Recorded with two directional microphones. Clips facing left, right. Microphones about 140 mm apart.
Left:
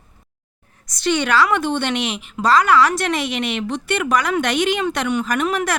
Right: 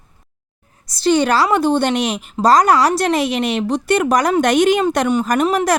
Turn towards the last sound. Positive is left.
turn(degrees=-35)  # may be behind; listen again after turning